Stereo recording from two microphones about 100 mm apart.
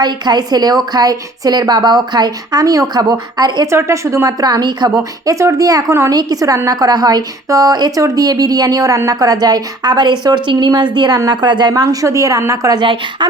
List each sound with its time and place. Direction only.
0.0 s speech: 45° right (ahead or behind)
3.7 s speech: 30° right (ahead or behind); by 11.7 s 50° right (ahead or behind)
11.7 s speech: 35° right (ahead or behind)
12.7 s speech: 50° right (ahead or behind)